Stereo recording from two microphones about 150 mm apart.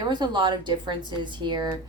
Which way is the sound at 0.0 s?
30° right (ahead or behind).